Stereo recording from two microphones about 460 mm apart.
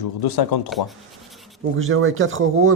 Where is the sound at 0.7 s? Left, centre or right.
Centre.